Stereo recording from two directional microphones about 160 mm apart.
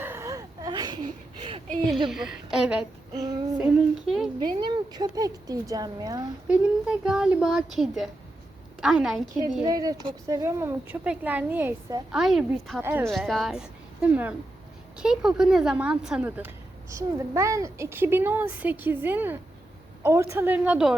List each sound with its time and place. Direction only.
0.0 s a sound: 15° right (ahead or behind); by 1.6 s 35° right (ahead or behind)
2.0 s a woman's voice: 5° right (ahead or behind)
3.6 s child singing: 5° right (ahead or behind)
4.4 s speech: 30° right (ahead or behind)
6.5 s a woman's voice: 5° right (ahead or behind)
9.6 s a woman's voice: 25° right (ahead or behind); by 12.8 s centre (ahead or behind)
12.8 s a woman's voice: 15° right (ahead or behind)
13.1 s a woman's voice: centre (ahead or behind)